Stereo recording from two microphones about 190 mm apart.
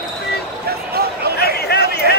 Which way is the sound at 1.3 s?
55° left (ahead or behind).